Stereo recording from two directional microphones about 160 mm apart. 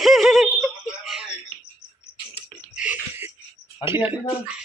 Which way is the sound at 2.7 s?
10° right (ahead or behind).